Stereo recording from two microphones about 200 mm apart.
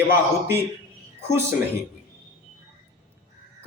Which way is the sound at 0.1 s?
10° right (ahead or behind).